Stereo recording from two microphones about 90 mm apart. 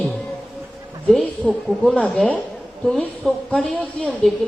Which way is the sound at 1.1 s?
10° left (ahead or behind).